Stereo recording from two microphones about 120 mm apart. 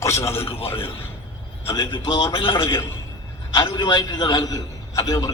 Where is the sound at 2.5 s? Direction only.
30° left (ahead or behind).